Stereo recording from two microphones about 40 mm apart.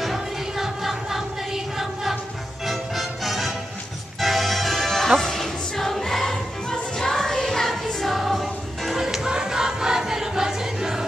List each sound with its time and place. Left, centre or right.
0.0 s music: centre
9.3 s choir: centre